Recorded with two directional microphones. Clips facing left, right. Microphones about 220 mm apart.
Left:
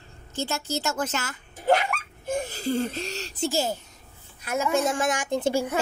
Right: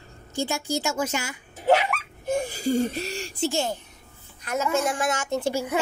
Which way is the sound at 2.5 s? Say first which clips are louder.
Right 3 dB; 10° right (ahead or behind).